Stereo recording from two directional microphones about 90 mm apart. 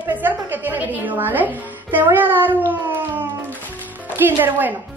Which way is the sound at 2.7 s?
20° right (ahead or behind).